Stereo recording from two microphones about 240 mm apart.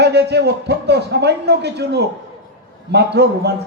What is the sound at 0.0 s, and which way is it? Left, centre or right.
A man's voice, right.